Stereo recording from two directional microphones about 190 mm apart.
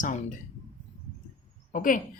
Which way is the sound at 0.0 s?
40° left (ahead or behind).